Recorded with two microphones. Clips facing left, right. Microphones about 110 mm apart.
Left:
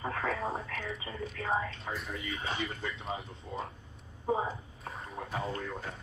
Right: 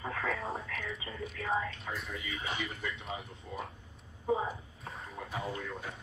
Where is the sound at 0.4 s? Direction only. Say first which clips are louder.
Left 3 dB; 30° left (ahead or behind).